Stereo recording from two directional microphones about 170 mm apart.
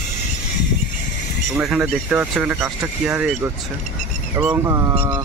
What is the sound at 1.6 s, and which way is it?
Speech, 5° right (ahead or behind).